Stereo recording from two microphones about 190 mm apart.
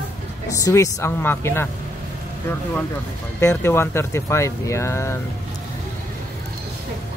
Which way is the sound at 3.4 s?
15° left (ahead or behind).